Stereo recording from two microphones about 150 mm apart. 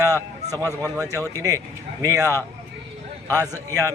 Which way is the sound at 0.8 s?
20° right (ahead or behind).